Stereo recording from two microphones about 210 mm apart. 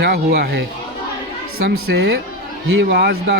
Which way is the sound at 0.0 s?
50° right (ahead or behind).